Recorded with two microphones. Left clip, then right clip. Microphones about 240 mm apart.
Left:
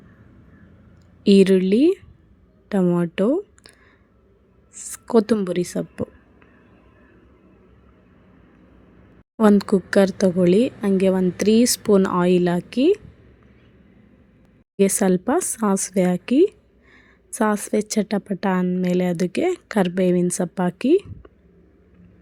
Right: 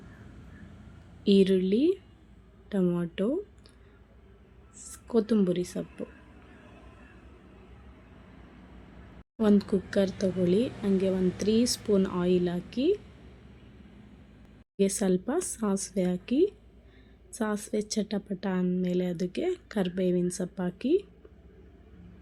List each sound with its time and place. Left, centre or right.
1.2 s a woman's voice: left
4.7 s a woman's voice: left
9.4 s a woman's voice: left
14.8 s a woman's voice: left